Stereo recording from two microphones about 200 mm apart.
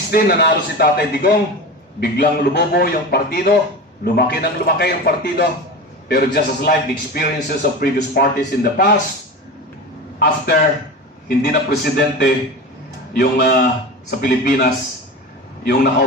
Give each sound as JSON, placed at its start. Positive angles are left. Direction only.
{"t": 0.1, "sound": "a man's voice", "side_deg": 50}
{"t": 10.2, "sound": "a man's voice", "side_deg": 50}